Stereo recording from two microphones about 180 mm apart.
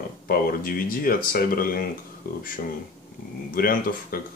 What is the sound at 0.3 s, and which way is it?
Speech, 55° left (ahead or behind).